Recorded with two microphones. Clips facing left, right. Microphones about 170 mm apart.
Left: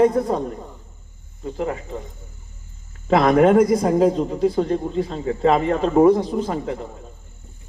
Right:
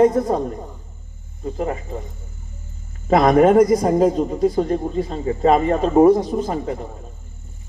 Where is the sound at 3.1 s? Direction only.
35° right (ahead or behind).